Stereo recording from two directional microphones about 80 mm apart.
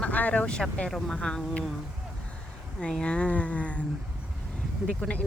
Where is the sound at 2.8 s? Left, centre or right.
Centre.